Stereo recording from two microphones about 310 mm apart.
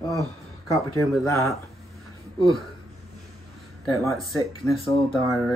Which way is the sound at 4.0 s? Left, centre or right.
Centre.